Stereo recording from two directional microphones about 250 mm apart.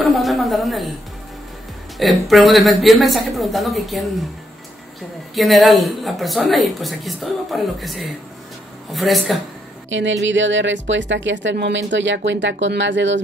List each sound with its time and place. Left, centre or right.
0.0 s a sound: centre
2.0 s a woman's voice: centre
5.3 s a woman's voice: centre
9.8 s speech: right